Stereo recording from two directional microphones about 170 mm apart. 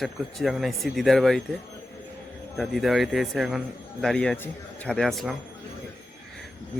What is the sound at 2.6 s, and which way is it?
A man's voice, centre (ahead or behind).